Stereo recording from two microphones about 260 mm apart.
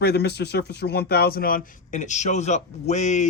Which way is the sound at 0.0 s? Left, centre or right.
Left.